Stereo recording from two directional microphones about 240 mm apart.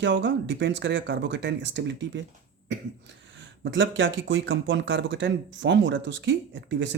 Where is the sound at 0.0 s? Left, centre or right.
Right.